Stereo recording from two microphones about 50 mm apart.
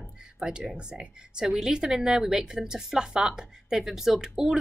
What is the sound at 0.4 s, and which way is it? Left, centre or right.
A woman's voice, centre.